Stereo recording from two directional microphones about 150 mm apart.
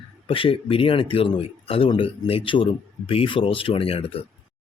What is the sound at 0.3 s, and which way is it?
Speech, 35° left (ahead or behind).